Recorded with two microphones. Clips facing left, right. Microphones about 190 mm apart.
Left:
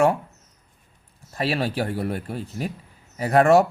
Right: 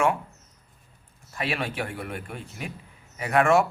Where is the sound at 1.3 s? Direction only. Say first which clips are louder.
Left 5 dB; 35° left (ahead or behind).